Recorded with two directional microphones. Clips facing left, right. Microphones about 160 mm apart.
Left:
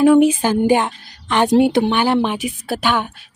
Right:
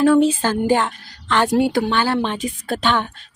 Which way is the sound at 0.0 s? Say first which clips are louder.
Left 3 dB; 15° left (ahead or behind).